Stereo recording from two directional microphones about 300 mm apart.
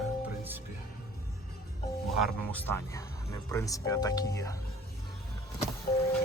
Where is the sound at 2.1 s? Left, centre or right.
Centre.